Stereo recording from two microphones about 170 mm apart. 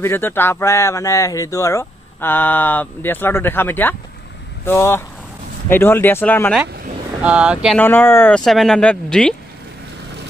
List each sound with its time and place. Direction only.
0.0 s speech: 15° left (ahead or behind)
7.2 s speech: 5° right (ahead or behind)
7.7 s speech: 10° left (ahead or behind)